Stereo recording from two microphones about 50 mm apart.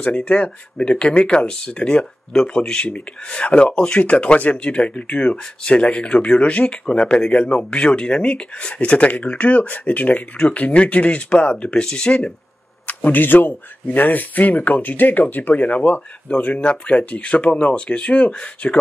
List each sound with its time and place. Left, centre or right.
0.0 s speech: left
12.8 s speech: left